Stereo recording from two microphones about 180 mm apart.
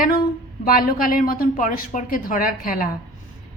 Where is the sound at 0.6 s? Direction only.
50° left (ahead or behind).